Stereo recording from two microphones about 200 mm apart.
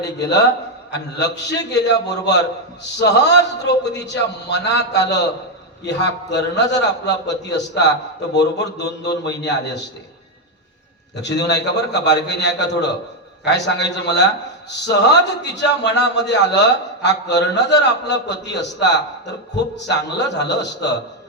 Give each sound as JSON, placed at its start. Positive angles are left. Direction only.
{"t": 0.2, "sound": "a man's voice", "side_deg": 60}
{"t": 11.2, "sound": "a man's voice", "side_deg": 60}